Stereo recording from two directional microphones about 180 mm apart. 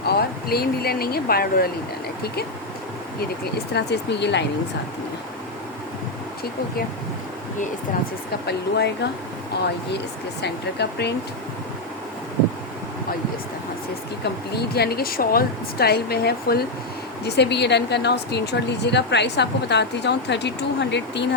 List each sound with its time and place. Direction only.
0.0 s speech: 60° left (ahead or behind)
3.2 s a woman's voice: 60° left (ahead or behind)
8.4 s a woman's voice: 70° left (ahead or behind)
10.4 s a woman's voice: 70° left (ahead or behind)
14.5 s a woman's voice: 60° left (ahead or behind)